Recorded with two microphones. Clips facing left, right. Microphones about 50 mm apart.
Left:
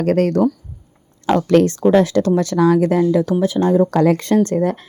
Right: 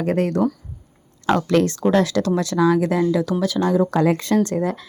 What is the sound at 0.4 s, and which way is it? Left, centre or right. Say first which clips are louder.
A woman's voice: left 4 dB; left.